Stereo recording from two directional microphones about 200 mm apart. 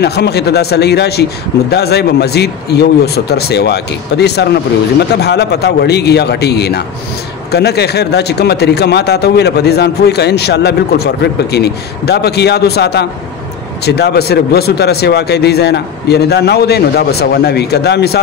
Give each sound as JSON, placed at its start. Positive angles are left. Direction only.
{"t": 0.0, "sound": "speech", "side_deg": 55}